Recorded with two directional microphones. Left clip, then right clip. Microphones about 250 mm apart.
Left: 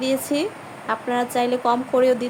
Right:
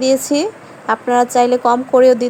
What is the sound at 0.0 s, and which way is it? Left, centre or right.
Speech, right.